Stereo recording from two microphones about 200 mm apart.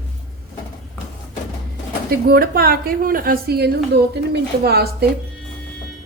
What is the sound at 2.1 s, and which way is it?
A woman's voice, 50° right (ahead or behind).